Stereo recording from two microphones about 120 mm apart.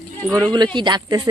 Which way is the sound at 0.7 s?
40° right (ahead or behind).